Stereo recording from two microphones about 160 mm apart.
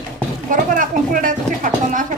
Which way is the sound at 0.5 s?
55° right (ahead or behind).